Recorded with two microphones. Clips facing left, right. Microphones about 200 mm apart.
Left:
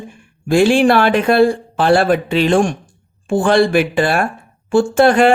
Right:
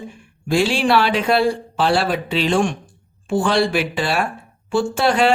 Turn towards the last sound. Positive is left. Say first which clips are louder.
# left 6 dB
turn(degrees=50)  # may be behind; listen again after turning